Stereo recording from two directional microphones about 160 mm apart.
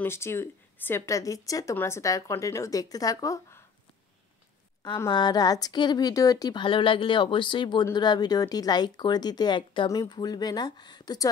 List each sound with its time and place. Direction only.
0.0 s a woman's voice: 15° left (ahead or behind)
4.8 s a woman's voice: 25° left (ahead or behind)